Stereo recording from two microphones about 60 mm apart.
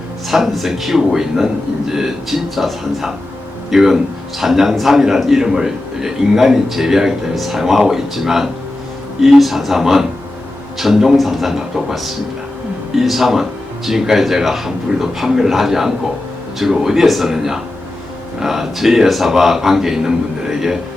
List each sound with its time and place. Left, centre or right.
0.3 s a man's voice: centre